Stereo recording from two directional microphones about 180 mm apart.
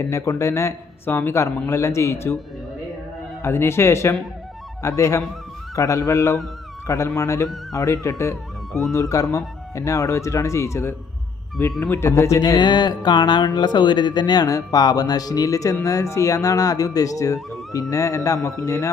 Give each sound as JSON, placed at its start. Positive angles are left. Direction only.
{"t": 0.0, "sound": "speech", "side_deg": 15}
{"t": 3.4, "sound": "speech", "side_deg": 15}